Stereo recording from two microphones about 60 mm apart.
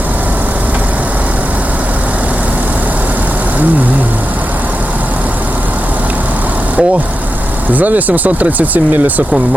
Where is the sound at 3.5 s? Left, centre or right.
Right.